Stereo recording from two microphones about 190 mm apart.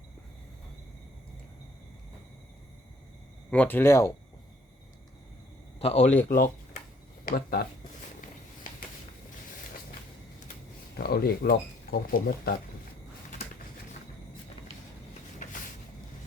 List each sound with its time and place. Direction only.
3.5 s speech: 10° left (ahead or behind)
5.8 s speech: 35° left (ahead or behind)
7.3 s speech: 55° left (ahead or behind)
10.9 s speech: 55° left (ahead or behind)